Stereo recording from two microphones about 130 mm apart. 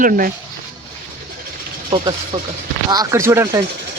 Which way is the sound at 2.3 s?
55° right (ahead or behind).